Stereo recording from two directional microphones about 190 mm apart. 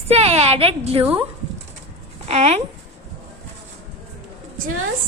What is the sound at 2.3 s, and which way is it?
Speech, 35° right (ahead or behind).